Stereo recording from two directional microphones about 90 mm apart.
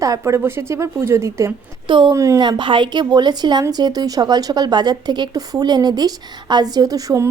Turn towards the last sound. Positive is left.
turn(degrees=-40)  # may be behind; listen again after turning